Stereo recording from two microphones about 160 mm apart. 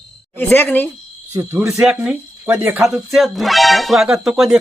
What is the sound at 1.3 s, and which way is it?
Speech, 15° right (ahead or behind).